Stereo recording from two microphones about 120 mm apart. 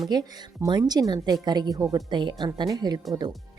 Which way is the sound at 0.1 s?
35° right (ahead or behind).